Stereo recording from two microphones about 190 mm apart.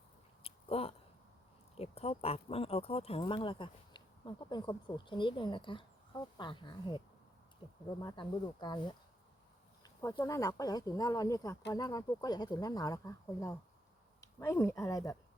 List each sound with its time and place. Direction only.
0.4 s a sound: 30° left (ahead or behind)
1.7 s speech: 30° left (ahead or behind)
8.0 s speech: 25° left (ahead or behind)